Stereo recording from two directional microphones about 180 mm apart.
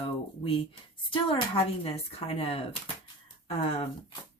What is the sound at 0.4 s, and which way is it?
Speech, 30° left (ahead or behind).